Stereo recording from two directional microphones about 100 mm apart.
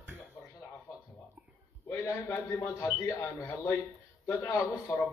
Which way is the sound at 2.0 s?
25° left (ahead or behind).